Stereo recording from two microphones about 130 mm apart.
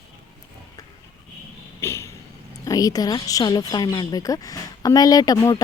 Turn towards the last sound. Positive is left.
turn(degrees=30)  # may be behind; listen again after turning